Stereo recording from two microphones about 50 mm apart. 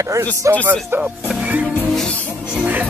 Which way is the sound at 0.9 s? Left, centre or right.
Right.